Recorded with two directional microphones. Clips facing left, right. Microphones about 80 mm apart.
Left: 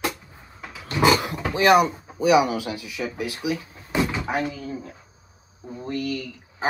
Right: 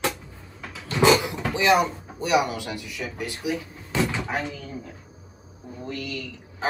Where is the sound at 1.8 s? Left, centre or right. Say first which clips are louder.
Left 6 dB; centre.